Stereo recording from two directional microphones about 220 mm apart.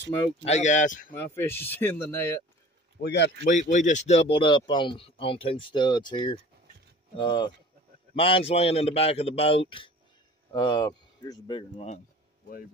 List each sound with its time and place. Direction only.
0.4 s speech: 30° left (ahead or behind)
1.1 s speech: 10° left (ahead or behind)
3.0 s speech: 50° left (ahead or behind)
3.4 s speech: 35° left (ahead or behind)